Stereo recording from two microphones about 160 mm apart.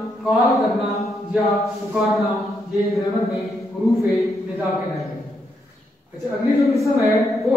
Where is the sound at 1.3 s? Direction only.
Centre (ahead or behind).